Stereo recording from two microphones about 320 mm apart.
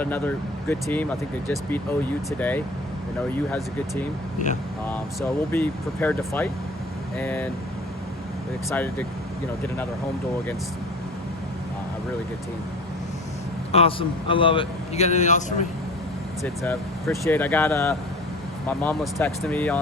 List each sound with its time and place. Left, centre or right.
0.0 s speech: centre
4.9 s speech: centre
8.7 s speech: centre
13.7 s a man's voice: centre
16.4 s speech: centre